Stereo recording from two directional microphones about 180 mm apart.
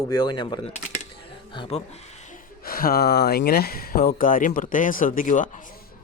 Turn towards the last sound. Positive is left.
turn(degrees=50)  # may be behind; listen again after turning